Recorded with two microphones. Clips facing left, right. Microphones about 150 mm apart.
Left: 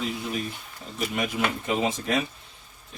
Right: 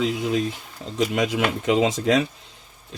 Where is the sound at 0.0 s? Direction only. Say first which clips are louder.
Right 7 dB; 90° right.